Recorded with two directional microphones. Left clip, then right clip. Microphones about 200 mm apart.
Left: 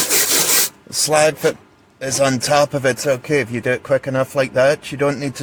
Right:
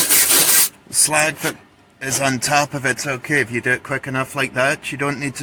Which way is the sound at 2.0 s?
40° left (ahead or behind).